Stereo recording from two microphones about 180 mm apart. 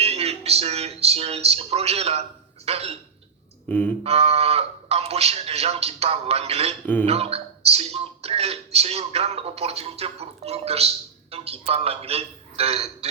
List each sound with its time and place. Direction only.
0.0 s speech: 35° right (ahead or behind)
3.7 s speech: 10° left (ahead or behind)
4.0 s speech: 35° right (ahead or behind)
6.8 s speech: 10° left (ahead or behind)
7.1 s speech: 35° right (ahead or behind)